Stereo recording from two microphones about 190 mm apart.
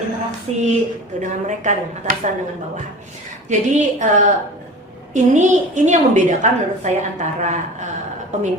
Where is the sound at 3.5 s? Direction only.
40° right (ahead or behind).